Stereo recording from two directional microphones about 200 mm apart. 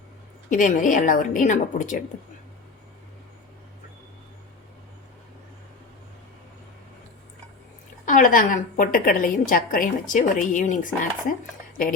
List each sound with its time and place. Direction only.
0.5 s a woman's voice: 40° left (ahead or behind)
8.0 s a woman's voice: 40° left (ahead or behind)